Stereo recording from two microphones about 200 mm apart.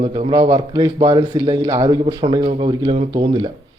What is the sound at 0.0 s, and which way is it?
A man's voice, 25° right (ahead or behind).